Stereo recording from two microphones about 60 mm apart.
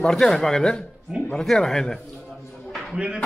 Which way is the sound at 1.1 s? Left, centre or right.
Centre.